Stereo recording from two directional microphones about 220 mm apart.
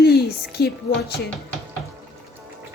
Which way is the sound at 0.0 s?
45° left (ahead or behind).